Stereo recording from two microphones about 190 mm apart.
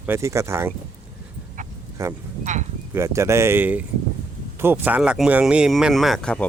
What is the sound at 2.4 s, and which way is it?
Speech, 40° right (ahead or behind).